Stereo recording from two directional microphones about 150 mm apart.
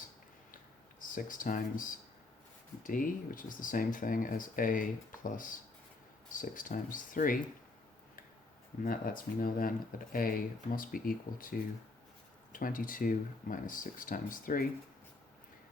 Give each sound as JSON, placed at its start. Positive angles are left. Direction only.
{"t": 0.9, "sound": "speech", "side_deg": 65}
{"t": 8.8, "sound": "speech", "side_deg": 70}
{"t": 12.5, "sound": "speech", "side_deg": 65}